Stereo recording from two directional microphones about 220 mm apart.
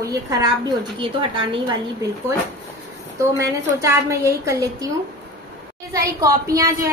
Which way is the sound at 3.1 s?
15° right (ahead or behind).